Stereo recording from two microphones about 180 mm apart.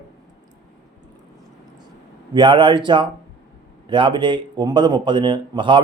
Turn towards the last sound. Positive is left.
turn(degrees=-25)  # may be behind; listen again after turning